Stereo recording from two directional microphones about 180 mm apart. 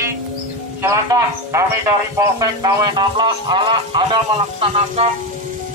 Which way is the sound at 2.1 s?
20° right (ahead or behind).